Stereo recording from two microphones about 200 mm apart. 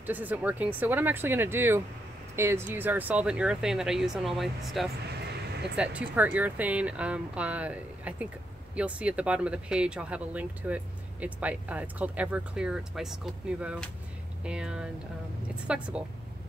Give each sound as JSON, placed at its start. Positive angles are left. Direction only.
{"t": 0.0, "sound": "speech", "side_deg": -10}
{"t": 5.0, "sound": "a sound", "side_deg": -55}
{"t": 5.8, "sound": "speech", "side_deg": -5}